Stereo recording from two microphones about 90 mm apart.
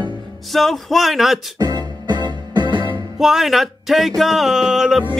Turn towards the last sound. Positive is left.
turn(degrees=-5)  # may be behind; listen again after turning